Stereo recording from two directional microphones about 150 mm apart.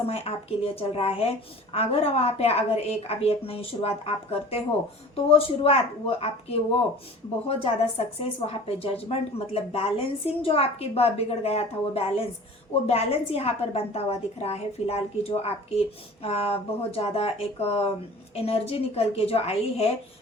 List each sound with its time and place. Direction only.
0.1 s a woman's voice: 40° left (ahead or behind)